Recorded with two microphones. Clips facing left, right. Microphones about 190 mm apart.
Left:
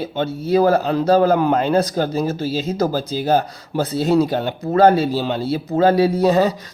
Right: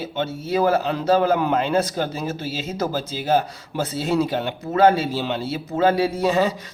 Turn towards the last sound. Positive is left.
turn(degrees=40)  # may be behind; listen again after turning